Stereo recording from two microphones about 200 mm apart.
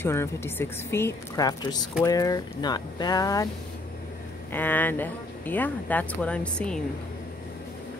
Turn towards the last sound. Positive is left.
turn(degrees=5)  # may be behind; listen again after turning